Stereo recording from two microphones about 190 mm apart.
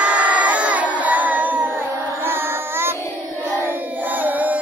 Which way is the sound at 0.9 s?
10° right (ahead or behind).